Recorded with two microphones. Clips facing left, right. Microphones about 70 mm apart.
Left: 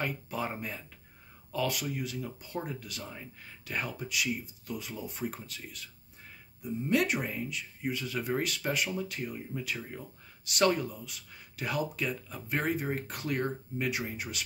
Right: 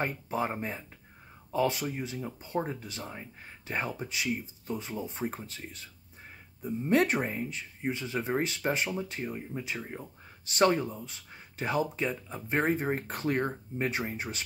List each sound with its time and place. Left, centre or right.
0.0 s speech: right